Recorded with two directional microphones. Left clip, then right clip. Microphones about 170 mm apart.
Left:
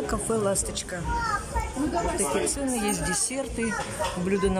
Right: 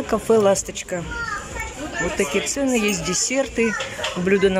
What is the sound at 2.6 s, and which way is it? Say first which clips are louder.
Speech: right 7 dB; 5° right (ahead or behind).